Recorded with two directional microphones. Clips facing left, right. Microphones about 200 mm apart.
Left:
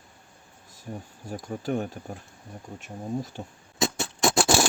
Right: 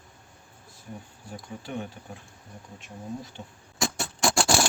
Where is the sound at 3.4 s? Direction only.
45° left (ahead or behind).